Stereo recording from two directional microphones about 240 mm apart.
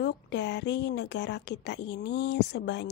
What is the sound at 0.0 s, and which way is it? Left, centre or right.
A woman's voice, left.